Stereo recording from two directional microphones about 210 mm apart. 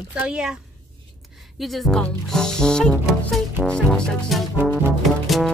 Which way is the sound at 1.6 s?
Centre (ahead or behind).